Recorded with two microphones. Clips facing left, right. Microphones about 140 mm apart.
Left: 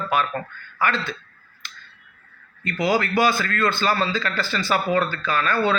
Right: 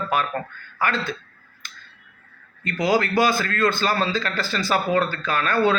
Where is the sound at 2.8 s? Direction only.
40° right (ahead or behind).